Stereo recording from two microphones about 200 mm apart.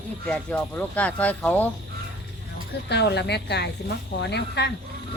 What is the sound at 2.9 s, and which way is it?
A woman's voice, 55° left (ahead or behind).